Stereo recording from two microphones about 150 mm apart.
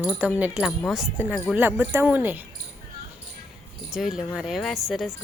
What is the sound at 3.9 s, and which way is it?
Speech, 5° right (ahead or behind).